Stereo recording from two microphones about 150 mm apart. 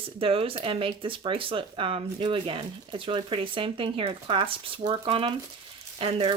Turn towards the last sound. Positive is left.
turn(degrees=-40)  # may be behind; listen again after turning